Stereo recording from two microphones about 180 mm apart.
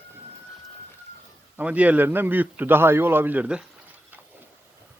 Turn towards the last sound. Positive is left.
turn(degrees=-5)  # may be behind; listen again after turning